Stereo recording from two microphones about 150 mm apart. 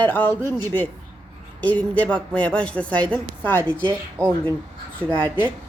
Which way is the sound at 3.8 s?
30° right (ahead or behind).